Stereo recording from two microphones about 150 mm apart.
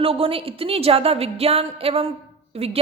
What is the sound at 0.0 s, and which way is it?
A woman's voice, 40° right (ahead or behind).